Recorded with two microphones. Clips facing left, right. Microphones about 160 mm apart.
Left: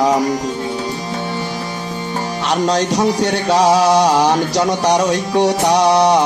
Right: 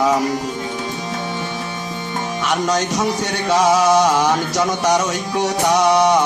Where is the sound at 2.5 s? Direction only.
35° left (ahead or behind).